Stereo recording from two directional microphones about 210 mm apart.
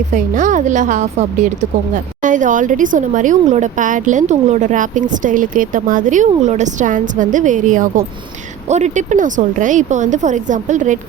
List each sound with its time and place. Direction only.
0.1 s a woman's voice: 35° right (ahead or behind)